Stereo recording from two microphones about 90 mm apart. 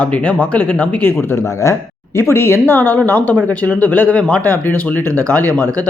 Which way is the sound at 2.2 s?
25° left (ahead or behind).